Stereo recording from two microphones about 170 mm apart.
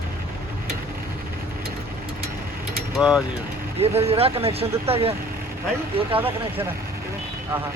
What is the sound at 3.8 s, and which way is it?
Speech, 35° right (ahead or behind).